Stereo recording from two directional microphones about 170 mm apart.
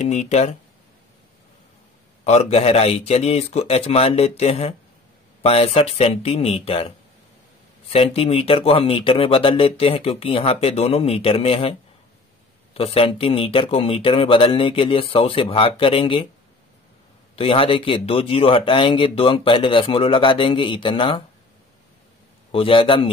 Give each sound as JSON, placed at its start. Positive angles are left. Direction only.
{"t": 0.0, "sound": "speech", "side_deg": 40}
{"t": 2.2, "sound": "speech", "side_deg": 40}
{"t": 7.9, "sound": "speech", "side_deg": 35}
{"t": 12.7, "sound": "speech", "side_deg": 35}
{"t": 17.4, "sound": "speech", "side_deg": 35}
{"t": 22.5, "sound": "speech", "side_deg": 30}